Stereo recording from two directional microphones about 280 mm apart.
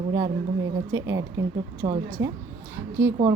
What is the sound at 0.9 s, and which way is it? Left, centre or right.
Speech, right.